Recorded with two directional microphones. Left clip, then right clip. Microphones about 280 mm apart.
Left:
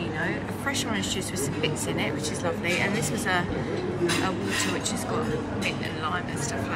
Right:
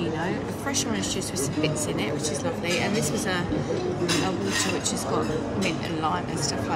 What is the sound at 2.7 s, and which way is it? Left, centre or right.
Speech, centre.